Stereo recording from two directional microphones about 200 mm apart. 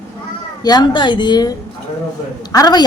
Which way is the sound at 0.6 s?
20° left (ahead or behind).